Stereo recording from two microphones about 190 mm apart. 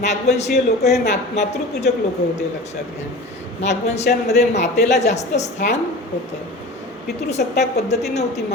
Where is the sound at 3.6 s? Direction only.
35° left (ahead or behind).